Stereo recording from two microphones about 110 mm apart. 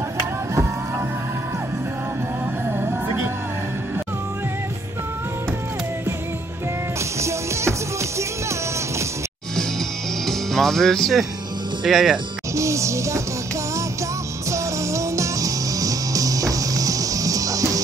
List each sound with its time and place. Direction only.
7.2 s music: 25° right (ahead or behind)
10.2 s speech: 5° left (ahead or behind)
12.5 s music: 25° right (ahead or behind)
14.5 s music: 25° right (ahead or behind)